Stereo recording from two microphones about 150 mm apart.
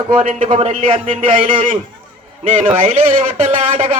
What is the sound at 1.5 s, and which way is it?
Speech, 60° right (ahead or behind).